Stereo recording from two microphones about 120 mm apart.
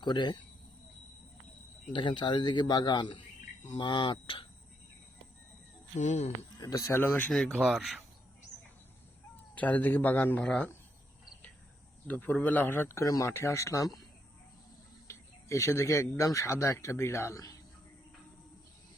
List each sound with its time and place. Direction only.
0.0 s a man's voice: 40° left (ahead or behind)
1.9 s a man's voice: 40° left (ahead or behind)
6.0 s speech: 75° left (ahead or behind)
6.6 s speech: 30° left (ahead or behind)
7.0 s speech: 15° left (ahead or behind)
7.3 s speech: 5° left (ahead or behind)
9.3 s speech: 15° left (ahead or behind)
12.0 s speech: 10° left (ahead or behind)
15.0 s speech: 25° left (ahead or behind)